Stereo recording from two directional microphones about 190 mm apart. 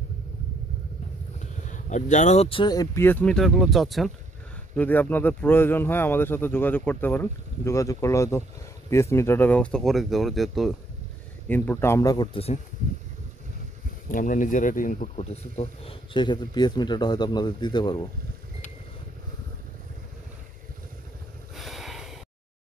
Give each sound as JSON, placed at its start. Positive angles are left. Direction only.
{"t": 1.7, "sound": "speech", "side_deg": 40}
{"t": 14.0, "sound": "speech", "side_deg": 45}
{"t": 21.5, "sound": "snort", "side_deg": 0}